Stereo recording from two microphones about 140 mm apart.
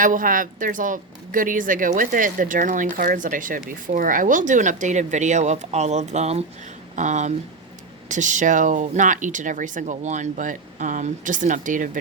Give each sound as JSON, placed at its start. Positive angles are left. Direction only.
{"t": 0.0, "sound": "a woman's voice", "side_deg": -75}